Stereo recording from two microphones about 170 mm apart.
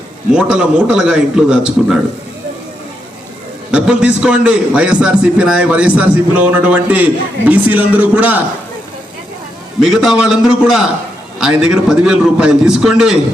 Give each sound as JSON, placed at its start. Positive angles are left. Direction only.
{"t": 0.3, "sound": "a man's voice", "side_deg": -5}
{"t": 3.7, "sound": "a man's voice", "side_deg": -5}
{"t": 9.8, "sound": "a man's voice", "side_deg": -5}